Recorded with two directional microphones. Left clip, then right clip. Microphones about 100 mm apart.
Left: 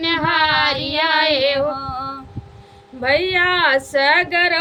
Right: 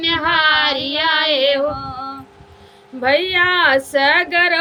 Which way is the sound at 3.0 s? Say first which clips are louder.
Right 1 dB; 25° right (ahead or behind).